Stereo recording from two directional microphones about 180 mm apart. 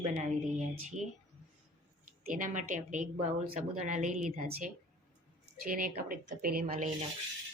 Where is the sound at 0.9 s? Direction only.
40° right (ahead or behind).